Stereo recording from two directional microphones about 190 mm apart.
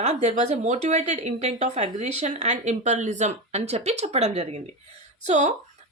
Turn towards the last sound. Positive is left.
turn(degrees=-40)  # may be behind; listen again after turning